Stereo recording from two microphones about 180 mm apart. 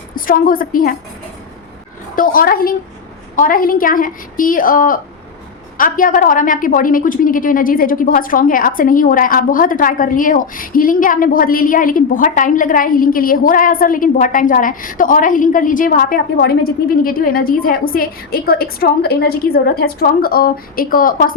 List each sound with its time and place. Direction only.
0.3 s a woman's voice: 50° left (ahead or behind)
2.1 s a woman's voice: 50° left (ahead or behind)